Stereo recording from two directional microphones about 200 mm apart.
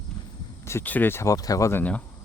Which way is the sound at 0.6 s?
15° left (ahead or behind).